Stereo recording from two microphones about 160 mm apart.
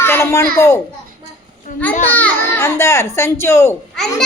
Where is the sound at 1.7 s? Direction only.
55° left (ahead or behind).